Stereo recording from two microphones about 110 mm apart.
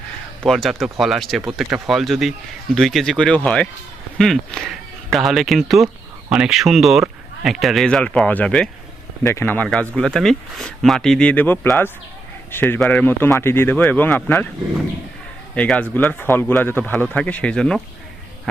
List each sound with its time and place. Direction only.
0.4 s speech: centre (ahead or behind)
9.2 s a man's voice: 20° left (ahead or behind)
10.1 s a man's voice: 5° left (ahead or behind)
15.5 s speech: 10° left (ahead or behind)